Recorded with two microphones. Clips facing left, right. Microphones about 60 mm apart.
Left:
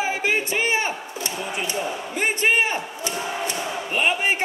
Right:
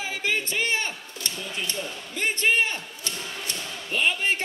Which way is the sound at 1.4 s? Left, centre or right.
Centre.